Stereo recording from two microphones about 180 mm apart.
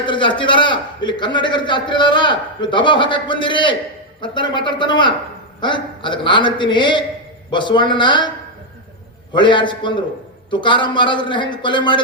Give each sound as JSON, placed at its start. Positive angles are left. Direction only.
{"t": 0.0, "sound": "a man's voice", "side_deg": 25}
{"t": 9.3, "sound": "a man's voice", "side_deg": 25}